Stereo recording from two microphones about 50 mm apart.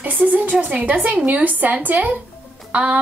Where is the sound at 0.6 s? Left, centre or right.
Right.